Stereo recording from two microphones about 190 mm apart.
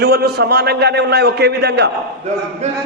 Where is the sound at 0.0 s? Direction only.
55° right (ahead or behind).